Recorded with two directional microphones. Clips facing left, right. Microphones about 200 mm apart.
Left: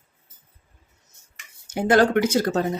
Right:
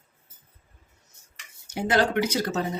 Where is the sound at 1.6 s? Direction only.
50° left (ahead or behind).